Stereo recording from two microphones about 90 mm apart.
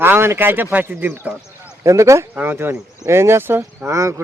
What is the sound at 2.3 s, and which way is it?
Speech, 25° right (ahead or behind).